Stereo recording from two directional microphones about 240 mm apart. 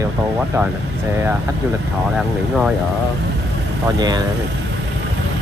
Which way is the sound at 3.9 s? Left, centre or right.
Centre.